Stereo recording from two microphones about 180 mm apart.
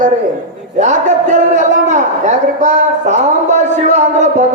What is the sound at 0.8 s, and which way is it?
A man's voice, 45° right (ahead or behind).